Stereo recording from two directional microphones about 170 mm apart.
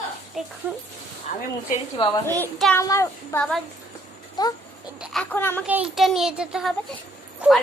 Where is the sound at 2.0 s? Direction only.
25° left (ahead or behind).